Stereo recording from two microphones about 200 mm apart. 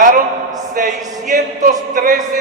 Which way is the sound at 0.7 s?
40° right (ahead or behind).